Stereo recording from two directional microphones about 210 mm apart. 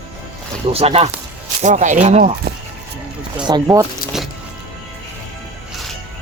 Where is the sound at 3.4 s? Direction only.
20° right (ahead or behind).